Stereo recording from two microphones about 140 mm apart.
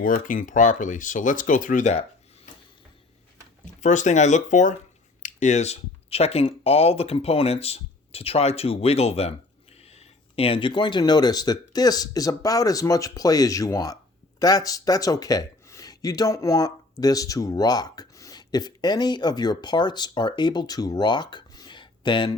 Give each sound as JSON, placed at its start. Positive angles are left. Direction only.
{"t": 0.0, "sound": "speech", "side_deg": 75}
{"t": 3.8, "sound": "speech", "side_deg": 60}